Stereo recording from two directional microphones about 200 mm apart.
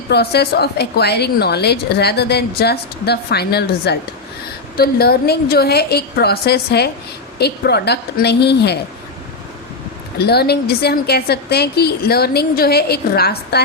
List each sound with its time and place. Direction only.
0.1 s a woman's voice: 55° left (ahead or behind)
10.2 s a woman's voice: 55° left (ahead or behind)